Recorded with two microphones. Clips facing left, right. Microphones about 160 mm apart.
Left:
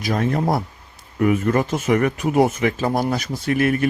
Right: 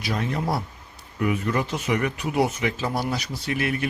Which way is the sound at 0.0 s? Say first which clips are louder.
Left 6 dB; 45° left (ahead or behind).